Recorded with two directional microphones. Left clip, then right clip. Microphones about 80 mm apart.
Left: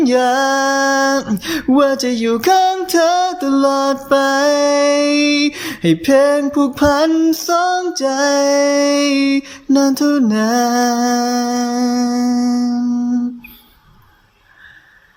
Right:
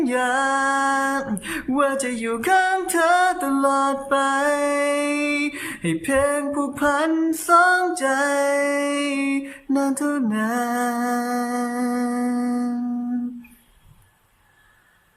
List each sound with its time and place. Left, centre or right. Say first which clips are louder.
0.0 s music: left 7 dB; left
1.4 s music: left 9 dB; left
7.4 s mantra: left 1 dB; left